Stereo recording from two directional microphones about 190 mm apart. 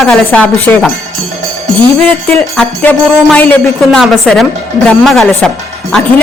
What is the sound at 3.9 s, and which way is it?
A woman's voice, centre (ahead or behind).